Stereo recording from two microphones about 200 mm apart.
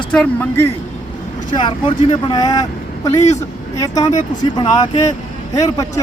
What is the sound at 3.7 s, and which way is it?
Speech, 15° left (ahead or behind).